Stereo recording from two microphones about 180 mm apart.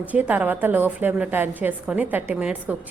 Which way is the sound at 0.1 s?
10° right (ahead or behind).